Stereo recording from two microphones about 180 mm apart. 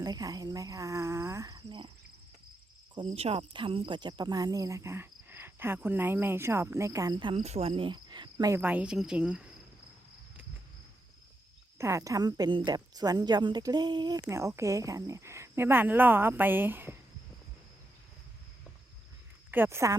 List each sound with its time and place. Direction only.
0.0 s speech: 20° right (ahead or behind)
3.2 s speech: 35° right (ahead or behind); by 9.5 s 5° right (ahead or behind)
11.8 s speech: 15° right (ahead or behind)
19.5 s speech: 10° right (ahead or behind)